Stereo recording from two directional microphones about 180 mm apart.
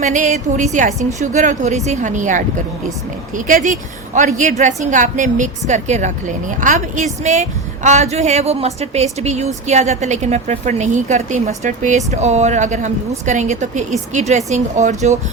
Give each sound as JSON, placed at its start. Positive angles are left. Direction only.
{"t": 0.0, "sound": "a woman's voice", "side_deg": -40}